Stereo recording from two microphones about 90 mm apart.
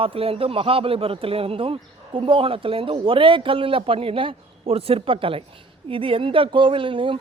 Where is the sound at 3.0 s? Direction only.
75° right (ahead or behind).